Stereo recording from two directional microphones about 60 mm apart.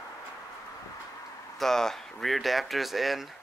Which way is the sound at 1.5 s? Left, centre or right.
Centre.